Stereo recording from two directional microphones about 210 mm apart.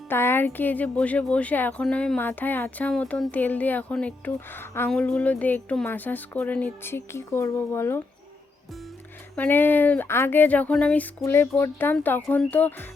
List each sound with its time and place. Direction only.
0.1 s speech: 10° left (ahead or behind)
9.3 s speech: 10° left (ahead or behind)